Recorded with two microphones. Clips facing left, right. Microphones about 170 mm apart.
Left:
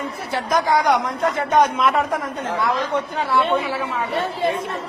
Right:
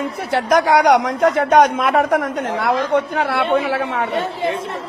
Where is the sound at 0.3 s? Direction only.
70° right (ahead or behind).